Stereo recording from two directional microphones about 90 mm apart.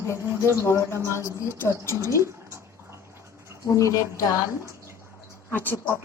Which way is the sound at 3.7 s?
40° left (ahead or behind).